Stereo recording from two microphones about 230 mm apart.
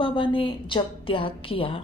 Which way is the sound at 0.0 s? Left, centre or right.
Left.